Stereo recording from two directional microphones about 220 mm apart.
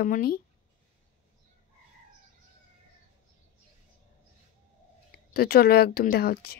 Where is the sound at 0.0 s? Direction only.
40° left (ahead or behind).